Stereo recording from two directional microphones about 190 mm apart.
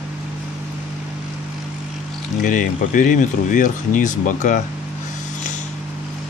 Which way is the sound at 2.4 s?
45° left (ahead or behind).